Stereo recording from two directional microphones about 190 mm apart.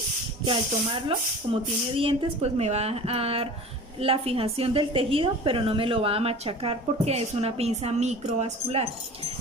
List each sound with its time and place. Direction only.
0.4 s a woman's voice: 25° right (ahead or behind)